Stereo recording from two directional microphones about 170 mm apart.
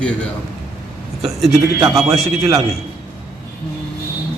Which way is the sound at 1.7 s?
20° right (ahead or behind).